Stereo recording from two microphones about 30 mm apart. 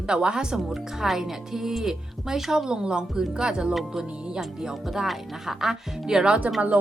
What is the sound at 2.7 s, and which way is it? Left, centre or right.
Speech, right.